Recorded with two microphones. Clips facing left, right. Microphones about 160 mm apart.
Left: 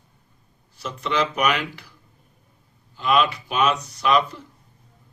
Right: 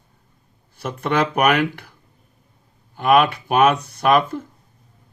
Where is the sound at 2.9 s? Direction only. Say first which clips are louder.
Right 5 dB; 55° right (ahead or behind).